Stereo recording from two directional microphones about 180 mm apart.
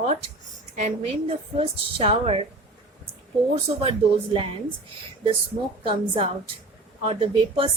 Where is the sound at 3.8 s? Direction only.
30° right (ahead or behind).